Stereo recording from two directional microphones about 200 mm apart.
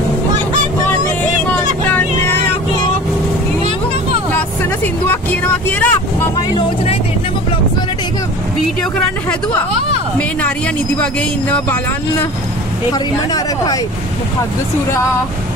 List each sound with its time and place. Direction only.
1.9 s vehicle: 10° left (ahead or behind)
5.1 s vehicle: 10° left (ahead or behind)
11.5 s speech: 5° left (ahead or behind)
12.9 s speech: 20° left (ahead or behind)